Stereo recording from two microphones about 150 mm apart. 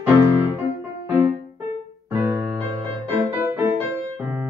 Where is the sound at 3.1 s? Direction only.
15° right (ahead or behind).